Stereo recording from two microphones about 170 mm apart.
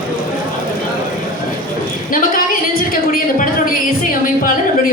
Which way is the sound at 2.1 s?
55° left (ahead or behind).